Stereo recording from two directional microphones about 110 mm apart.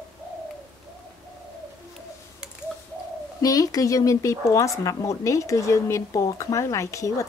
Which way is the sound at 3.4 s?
35° left (ahead or behind).